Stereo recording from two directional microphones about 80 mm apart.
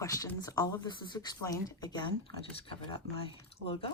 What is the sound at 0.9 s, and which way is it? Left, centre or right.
Speech, left.